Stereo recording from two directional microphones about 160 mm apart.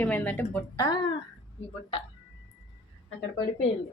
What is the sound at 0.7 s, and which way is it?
Speech, 25° left (ahead or behind).